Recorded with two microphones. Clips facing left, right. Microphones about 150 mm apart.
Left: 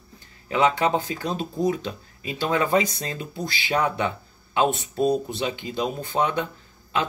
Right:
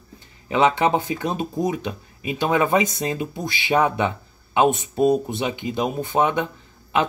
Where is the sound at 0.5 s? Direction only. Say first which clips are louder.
Right 3 dB; 25° right (ahead or behind).